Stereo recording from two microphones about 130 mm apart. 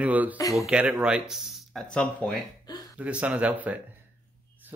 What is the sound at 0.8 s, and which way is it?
Speech, 10° right (ahead or behind).